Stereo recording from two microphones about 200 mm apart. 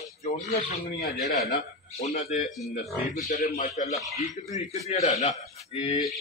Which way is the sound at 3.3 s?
40° left (ahead or behind).